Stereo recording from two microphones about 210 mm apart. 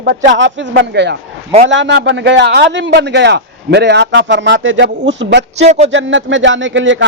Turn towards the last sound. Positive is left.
turn(degrees=-60)  # may be behind; listen again after turning